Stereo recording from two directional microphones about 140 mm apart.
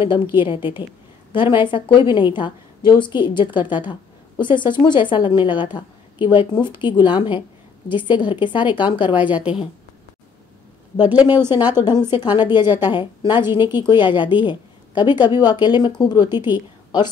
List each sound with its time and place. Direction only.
0.0 s a woman's voice: 35° left (ahead or behind)
9.3 s a woman's voice: 10° right (ahead or behind)
11.5 s a woman's voice: 30° left (ahead or behind)